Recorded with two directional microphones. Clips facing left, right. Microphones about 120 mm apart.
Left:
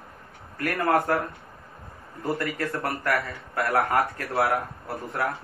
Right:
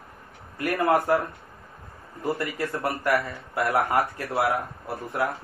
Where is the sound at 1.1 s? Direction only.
15° right (ahead or behind).